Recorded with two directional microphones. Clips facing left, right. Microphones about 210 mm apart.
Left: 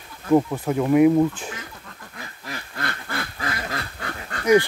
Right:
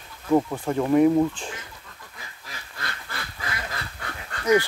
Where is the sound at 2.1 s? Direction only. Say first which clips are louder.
Left 9 dB; 60° left (ahead or behind).